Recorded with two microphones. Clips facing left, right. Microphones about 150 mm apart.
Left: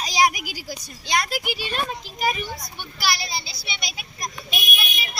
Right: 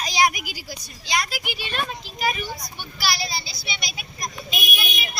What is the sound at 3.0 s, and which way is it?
Speech, 20° left (ahead or behind).